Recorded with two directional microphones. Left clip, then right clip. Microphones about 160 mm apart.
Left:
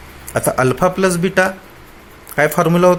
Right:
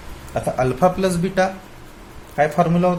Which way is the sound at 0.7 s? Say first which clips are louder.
Left 3 dB; 35° left (ahead or behind).